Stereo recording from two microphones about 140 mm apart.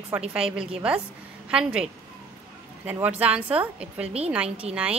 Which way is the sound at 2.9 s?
10° right (ahead or behind).